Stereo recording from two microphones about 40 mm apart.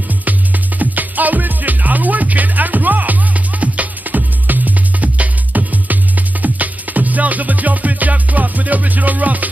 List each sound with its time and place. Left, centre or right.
0.2 s music: right